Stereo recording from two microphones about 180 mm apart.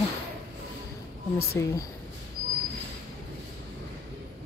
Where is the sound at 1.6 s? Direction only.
15° left (ahead or behind).